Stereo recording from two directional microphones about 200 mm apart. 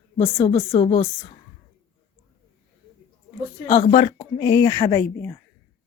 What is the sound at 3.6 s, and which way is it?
Speech, 30° left (ahead or behind).